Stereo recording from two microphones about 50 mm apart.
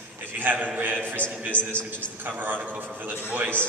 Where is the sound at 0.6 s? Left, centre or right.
Right.